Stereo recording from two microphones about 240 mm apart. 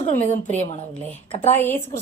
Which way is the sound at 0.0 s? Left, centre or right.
Left.